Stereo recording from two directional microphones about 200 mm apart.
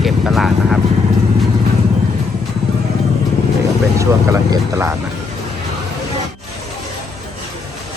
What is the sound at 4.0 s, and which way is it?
Speech, 15° right (ahead or behind).